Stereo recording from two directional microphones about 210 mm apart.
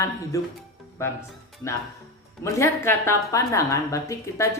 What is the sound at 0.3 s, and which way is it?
Speech, 15° left (ahead or behind).